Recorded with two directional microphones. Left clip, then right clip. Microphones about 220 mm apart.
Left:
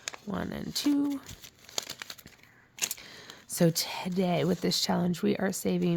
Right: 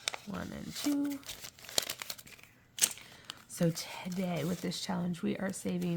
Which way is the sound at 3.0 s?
50° left (ahead or behind).